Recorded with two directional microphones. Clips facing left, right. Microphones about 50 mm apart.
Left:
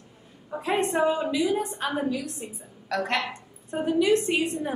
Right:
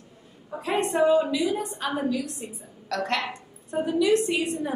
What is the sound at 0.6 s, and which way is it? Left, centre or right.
A woman's voice, left.